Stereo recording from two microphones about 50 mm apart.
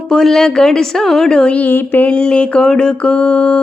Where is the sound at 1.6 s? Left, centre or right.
Left.